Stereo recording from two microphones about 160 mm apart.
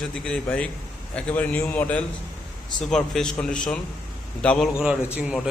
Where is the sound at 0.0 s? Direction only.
5° left (ahead or behind).